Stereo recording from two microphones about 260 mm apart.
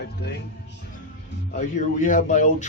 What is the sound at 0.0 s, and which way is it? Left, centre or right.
Speech, left.